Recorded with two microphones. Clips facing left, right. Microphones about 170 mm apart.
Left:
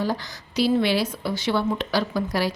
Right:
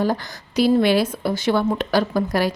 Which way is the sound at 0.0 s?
50° right (ahead or behind).